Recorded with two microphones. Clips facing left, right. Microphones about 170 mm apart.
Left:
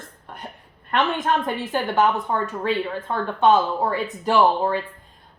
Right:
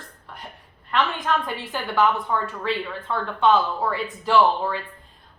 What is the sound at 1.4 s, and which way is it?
Speech, 45° left (ahead or behind).